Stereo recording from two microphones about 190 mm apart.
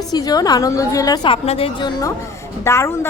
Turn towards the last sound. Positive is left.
turn(degrees=15)  # may be behind; listen again after turning